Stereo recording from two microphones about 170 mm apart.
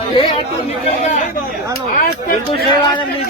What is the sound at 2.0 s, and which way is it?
Speech, 65° left (ahead or behind).